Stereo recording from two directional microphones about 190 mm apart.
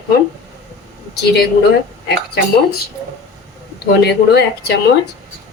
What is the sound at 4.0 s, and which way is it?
Speech, 60° left (ahead or behind).